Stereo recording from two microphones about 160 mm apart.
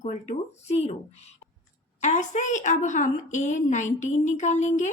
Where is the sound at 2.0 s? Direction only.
50° left (ahead or behind).